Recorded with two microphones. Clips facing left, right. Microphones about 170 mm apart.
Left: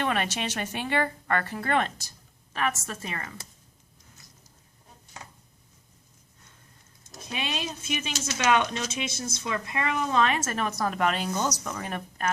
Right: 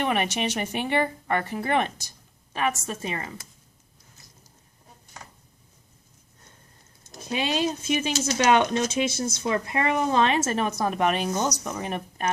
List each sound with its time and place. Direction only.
0.0 s speech: 15° right (ahead or behind)
7.1 s speech: 30° right (ahead or behind)